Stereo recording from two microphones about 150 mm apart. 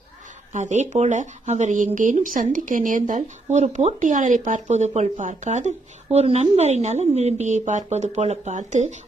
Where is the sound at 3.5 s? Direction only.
50° right (ahead or behind).